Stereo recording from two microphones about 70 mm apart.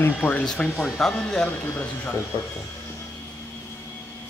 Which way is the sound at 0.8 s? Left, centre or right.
Centre.